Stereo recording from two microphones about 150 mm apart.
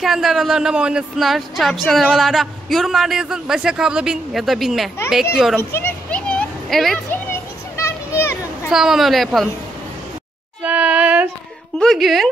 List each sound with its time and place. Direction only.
0.0 s speech: centre (ahead or behind)
5.6 s a sound: 15° left (ahead or behind)
7.1 s children playing: 15° left (ahead or behind)
8.6 s speech: 5° right (ahead or behind)
10.6 s a sound: 10° right (ahead or behind)
11.8 s speech: centre (ahead or behind)